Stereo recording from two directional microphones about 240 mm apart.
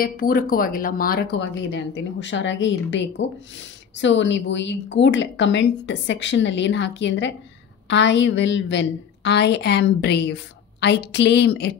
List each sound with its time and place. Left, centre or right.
0.0 s speech: left